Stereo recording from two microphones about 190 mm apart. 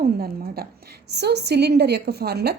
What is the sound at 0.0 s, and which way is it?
A woman's voice, 55° right (ahead or behind).